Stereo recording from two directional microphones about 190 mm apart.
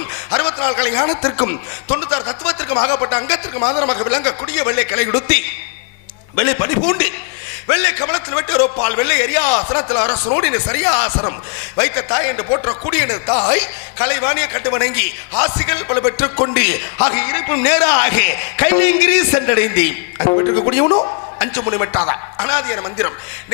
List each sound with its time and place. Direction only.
0.3 s a man's voice: 20° left (ahead or behind)
2.0 s speech: 30° left (ahead or behind)
3.6 s speech: 25° left (ahead or behind)
9.5 s speech: 25° left (ahead or behind)
20.2 s speech: 30° left (ahead or behind)
21.3 s a man's voice: 15° left (ahead or behind)